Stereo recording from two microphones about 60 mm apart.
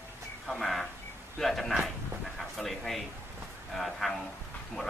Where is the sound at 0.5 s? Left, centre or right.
Centre.